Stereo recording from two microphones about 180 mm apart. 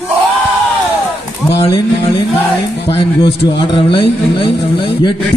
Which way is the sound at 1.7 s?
30° left (ahead or behind).